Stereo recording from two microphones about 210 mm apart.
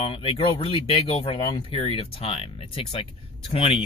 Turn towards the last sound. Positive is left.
turn(degrees=25)  # may be behind; listen again after turning